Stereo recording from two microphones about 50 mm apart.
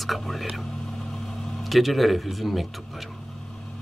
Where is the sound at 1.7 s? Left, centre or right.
Centre.